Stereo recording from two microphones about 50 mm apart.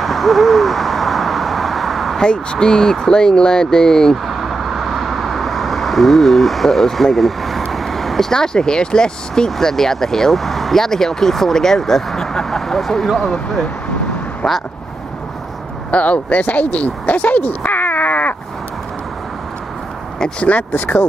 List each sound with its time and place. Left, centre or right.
0.0 s owl: centre
2.2 s speech: centre
4.3 s speech: centre
15.9 s speech: left
20.2 s speech: left